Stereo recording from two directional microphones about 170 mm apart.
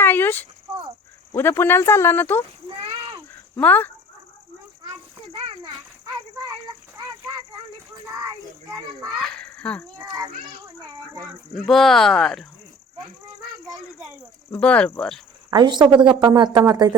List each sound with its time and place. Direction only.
0.0 s insect: 10° left (ahead or behind)
1.3 s speech: 15° left (ahead or behind)
3.6 s speech: 10° left (ahead or behind)
9.2 s a child's voice: 5° left (ahead or behind)
10.0 s a child's voice: 15° right (ahead or behind)
11.5 s speech: centre (ahead or behind)
14.5 s speech: 5° left (ahead or behind)
15.4 s speech: 25° right (ahead or behind)